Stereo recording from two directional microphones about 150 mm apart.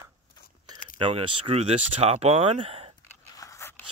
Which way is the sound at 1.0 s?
40° right (ahead or behind).